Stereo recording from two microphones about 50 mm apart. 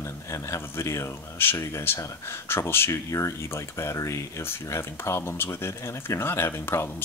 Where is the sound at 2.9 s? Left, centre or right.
Left.